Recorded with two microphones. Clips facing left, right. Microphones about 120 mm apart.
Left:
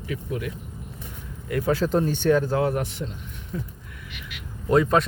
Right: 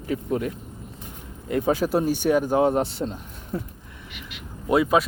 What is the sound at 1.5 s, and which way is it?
Speech, 20° right (ahead or behind).